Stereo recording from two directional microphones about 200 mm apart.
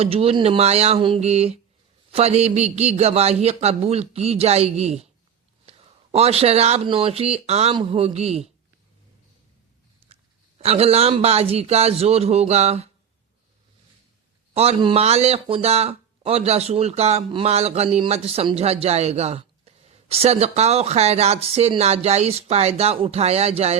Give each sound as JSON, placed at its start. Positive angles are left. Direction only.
{"t": 0.0, "sound": "speech", "side_deg": -30}
{"t": 10.6, "sound": "speech", "side_deg": -30}
{"t": 14.5, "sound": "speech", "side_deg": -30}